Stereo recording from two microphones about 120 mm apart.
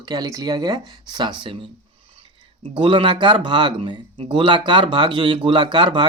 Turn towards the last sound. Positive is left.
turn(degrees=-40)  # may be behind; listen again after turning